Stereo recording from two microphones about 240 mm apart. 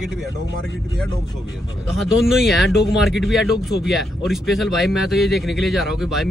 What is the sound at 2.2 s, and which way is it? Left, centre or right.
A man's voice, centre.